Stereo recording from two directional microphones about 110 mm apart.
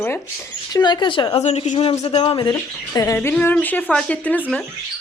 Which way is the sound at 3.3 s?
15° left (ahead or behind).